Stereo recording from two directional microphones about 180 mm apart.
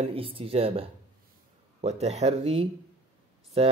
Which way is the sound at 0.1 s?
30° right (ahead or behind).